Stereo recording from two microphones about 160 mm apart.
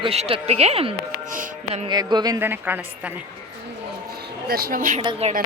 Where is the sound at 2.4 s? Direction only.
10° right (ahead or behind).